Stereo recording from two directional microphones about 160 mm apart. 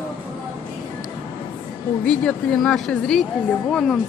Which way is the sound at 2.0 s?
5° left (ahead or behind).